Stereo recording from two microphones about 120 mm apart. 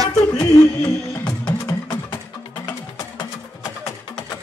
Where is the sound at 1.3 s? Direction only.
35° left (ahead or behind).